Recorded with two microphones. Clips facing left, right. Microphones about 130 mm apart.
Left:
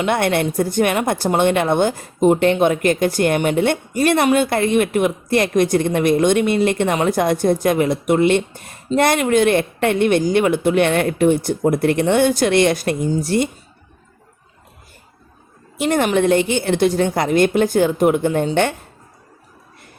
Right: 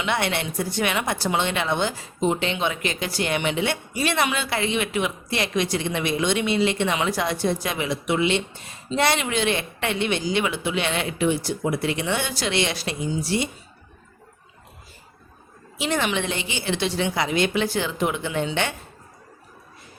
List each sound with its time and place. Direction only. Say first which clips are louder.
0.0 s a woman's voice: left 7 dB; 50° left (ahead or behind)
15.8 s a woman's voice: left 8 dB; 50° left (ahead or behind)